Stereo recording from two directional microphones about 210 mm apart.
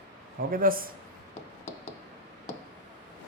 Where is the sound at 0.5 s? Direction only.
45° right (ahead or behind).